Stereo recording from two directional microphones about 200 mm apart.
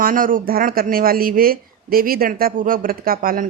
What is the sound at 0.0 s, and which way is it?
Speech, 45° right (ahead or behind).